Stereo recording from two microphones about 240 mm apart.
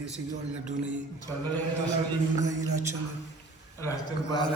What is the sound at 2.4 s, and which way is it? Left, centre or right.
Speech, centre.